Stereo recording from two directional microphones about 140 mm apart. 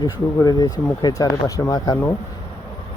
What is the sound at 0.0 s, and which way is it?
Speech, 30° left (ahead or behind).